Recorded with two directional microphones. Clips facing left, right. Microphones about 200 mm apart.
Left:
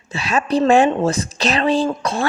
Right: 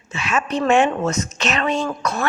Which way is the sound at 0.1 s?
35° left (ahead or behind).